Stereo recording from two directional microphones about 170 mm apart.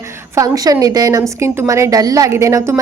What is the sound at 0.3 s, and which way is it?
A woman's voice, 20° right (ahead or behind).